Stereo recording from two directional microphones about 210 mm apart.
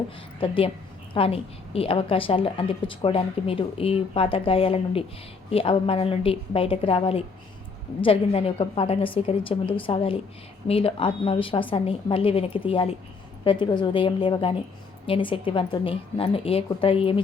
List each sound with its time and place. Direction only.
0.3 s a woman's voice: 25° left (ahead or behind)